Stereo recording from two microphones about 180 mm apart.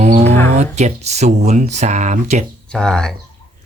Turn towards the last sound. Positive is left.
turn(degrees=5)  # may be behind; listen again after turning